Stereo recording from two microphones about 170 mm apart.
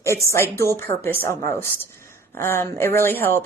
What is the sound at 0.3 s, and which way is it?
A woman's voice, 15° left (ahead or behind).